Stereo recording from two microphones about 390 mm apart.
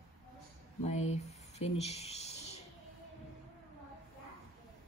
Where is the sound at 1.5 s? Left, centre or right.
Centre.